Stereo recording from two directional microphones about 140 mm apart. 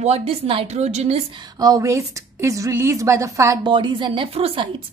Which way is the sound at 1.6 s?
25° right (ahead or behind).